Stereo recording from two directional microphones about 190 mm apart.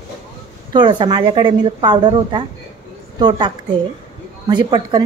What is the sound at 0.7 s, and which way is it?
A woman's voice, 25° right (ahead or behind).